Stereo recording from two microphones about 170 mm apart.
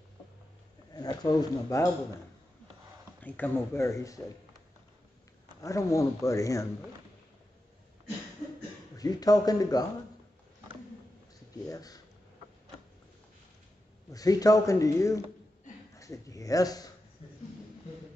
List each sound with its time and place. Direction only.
0.9 s speech: 20° left (ahead or behind)
3.2 s speech: 10° left (ahead or behind)
5.6 s speech: 20° left (ahead or behind)
8.9 s speech: 20° left (ahead or behind)
11.7 s speech: 20° left (ahead or behind)
14.1 s speech: 20° left (ahead or behind)
17.2 s a sound: 35° left (ahead or behind)